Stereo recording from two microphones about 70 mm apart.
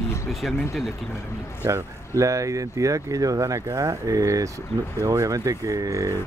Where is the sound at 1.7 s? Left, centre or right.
Right.